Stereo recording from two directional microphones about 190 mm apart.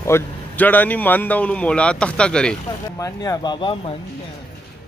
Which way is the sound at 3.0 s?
20° left (ahead or behind).